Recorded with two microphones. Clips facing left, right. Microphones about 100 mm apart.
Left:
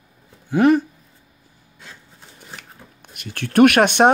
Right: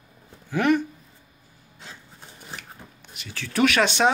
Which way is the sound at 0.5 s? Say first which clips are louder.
Left 6 dB; 30° left (ahead or behind).